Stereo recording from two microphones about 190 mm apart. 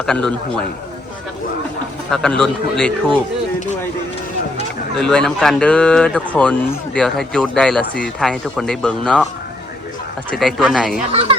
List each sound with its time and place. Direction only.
0.0 s speech: 5° left (ahead or behind)
2.0 s speech: centre (ahead or behind)
4.9 s speech: 5° left (ahead or behind)
10.3 s speech: centre (ahead or behind)
11.1 s speech: 30° right (ahead or behind)